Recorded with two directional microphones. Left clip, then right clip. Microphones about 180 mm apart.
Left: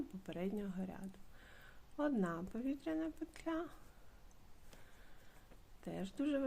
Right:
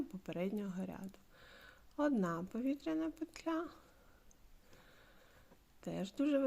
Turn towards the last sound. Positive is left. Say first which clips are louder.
# right 4 dB
turn(degrees=-20)  # may be behind; listen again after turning